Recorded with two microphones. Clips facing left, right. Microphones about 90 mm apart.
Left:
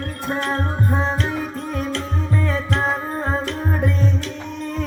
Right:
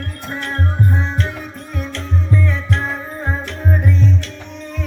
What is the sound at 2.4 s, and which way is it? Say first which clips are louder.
Music: even; 35° left (ahead or behind).